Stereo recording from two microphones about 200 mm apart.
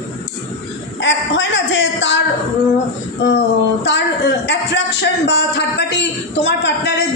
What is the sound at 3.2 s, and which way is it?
A man's voice, 60° left (ahead or behind).